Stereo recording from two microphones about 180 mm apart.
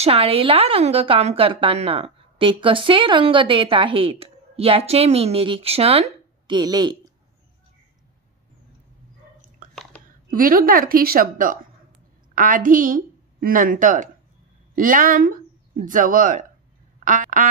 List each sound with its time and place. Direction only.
0.0 s a woman's voice: 30° right (ahead or behind)
10.3 s a woman's voice: 50° right (ahead or behind)
17.0 s quack: 45° right (ahead or behind)